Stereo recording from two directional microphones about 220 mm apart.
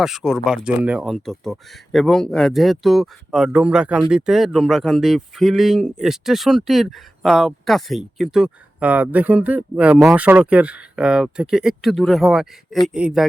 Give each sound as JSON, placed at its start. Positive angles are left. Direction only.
{"t": 0.0, "sound": "speech", "side_deg": 0}